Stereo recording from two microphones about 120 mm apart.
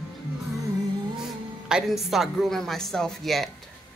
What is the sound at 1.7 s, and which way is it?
Speech, centre (ahead or behind).